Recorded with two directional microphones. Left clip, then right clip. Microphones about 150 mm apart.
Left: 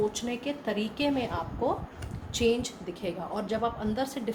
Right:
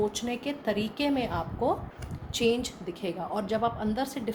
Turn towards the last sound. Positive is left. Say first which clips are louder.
# even
turn(degrees=-50)  # may be behind; listen again after turning